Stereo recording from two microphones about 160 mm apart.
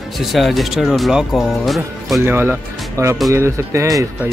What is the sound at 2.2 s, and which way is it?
Speech, 15° right (ahead or behind).